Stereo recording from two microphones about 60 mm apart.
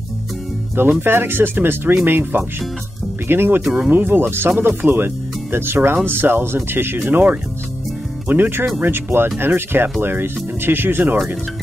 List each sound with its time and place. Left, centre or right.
0.7 s speech: right